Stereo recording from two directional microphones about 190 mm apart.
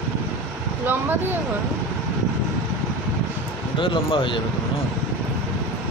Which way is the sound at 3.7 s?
25° left (ahead or behind).